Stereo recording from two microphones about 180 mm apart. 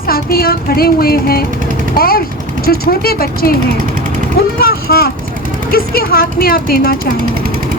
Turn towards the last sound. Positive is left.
turn(degrees=55)  # may be behind; listen again after turning